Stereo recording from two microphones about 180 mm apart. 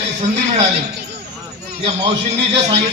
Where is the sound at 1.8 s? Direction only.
35° right (ahead or behind).